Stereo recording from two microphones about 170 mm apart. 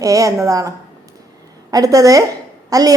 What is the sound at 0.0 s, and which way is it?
Speech, 20° right (ahead or behind).